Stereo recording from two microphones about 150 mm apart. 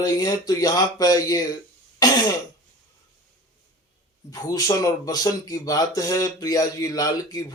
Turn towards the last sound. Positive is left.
turn(degrees=25)  # may be behind; listen again after turning